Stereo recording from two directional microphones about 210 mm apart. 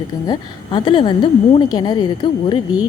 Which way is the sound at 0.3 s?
20° left (ahead or behind).